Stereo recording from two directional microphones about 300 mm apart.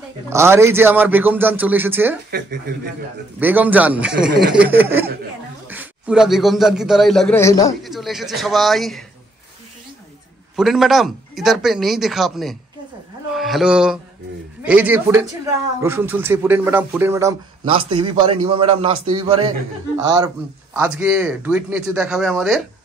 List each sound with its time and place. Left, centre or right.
0.3 s speech: centre
2.3 s speech: right
3.3 s a man's voice: centre
7.8 s a man's voice: centre
10.5 s a man's voice: centre